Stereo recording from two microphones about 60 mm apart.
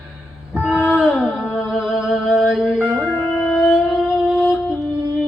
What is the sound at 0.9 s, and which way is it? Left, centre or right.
Music, centre.